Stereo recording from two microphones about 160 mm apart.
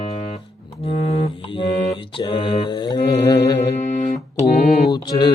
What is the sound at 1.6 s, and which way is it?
Mantra, 30° left (ahead or behind).